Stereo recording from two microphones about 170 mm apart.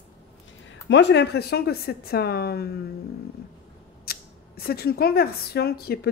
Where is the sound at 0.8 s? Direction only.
85° left; by 2.8 s 70° left (ahead or behind).